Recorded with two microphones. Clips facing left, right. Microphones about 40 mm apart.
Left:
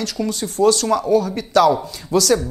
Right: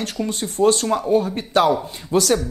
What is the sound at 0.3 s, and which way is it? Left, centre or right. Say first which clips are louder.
Speech: left 1 dB; right.